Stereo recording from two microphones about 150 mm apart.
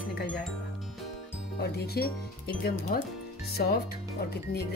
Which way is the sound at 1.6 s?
90° left.